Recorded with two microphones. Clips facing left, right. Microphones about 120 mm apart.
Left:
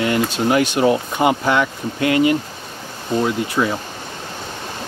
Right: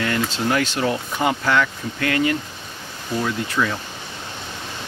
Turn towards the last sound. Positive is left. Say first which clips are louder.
# left 4 dB
turn(degrees=25)  # may be behind; listen again after turning